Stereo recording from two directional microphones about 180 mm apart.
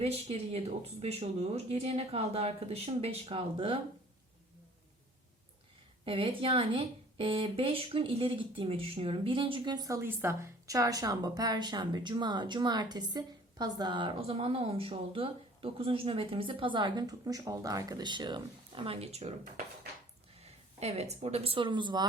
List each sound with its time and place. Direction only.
0.0 s speech: 35° right (ahead or behind)
6.1 s speech: 30° right (ahead or behind)
20.4 s speech: 35° right (ahead or behind)